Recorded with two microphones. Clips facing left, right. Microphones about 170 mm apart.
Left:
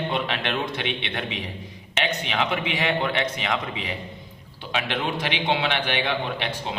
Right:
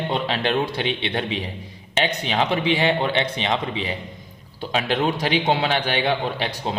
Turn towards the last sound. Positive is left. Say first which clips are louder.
# right 3 dB
turn(degrees=-35)  # may be behind; listen again after turning